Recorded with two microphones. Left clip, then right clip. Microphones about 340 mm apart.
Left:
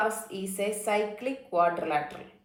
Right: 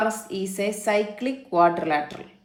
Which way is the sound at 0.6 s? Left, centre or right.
Right.